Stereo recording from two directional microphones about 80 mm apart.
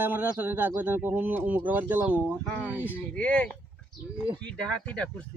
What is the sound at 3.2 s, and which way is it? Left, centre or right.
Speech, centre.